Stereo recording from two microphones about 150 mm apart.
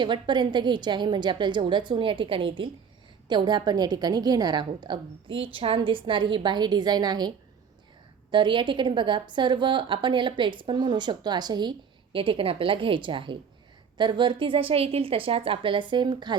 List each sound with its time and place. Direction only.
0.0 s a woman's voice: 30° right (ahead or behind)